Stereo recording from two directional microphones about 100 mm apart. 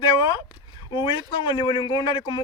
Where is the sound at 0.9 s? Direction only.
60° left (ahead or behind).